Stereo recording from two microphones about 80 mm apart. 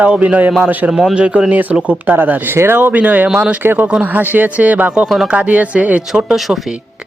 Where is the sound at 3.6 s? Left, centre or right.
Right.